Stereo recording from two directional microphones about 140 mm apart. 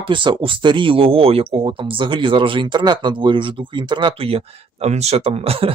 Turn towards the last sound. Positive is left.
turn(degrees=-45)  # may be behind; listen again after turning